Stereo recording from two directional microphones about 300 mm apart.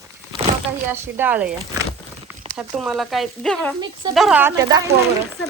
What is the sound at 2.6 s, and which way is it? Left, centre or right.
Speech, centre.